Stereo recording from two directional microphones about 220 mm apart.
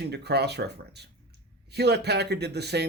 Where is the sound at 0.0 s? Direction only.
50° right (ahead or behind).